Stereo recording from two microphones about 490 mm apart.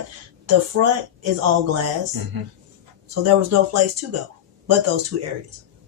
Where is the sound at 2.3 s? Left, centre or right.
Right.